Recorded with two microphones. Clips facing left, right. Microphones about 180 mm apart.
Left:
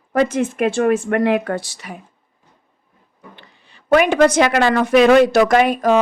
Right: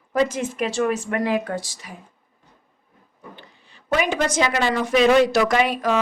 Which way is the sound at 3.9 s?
65° left (ahead or behind).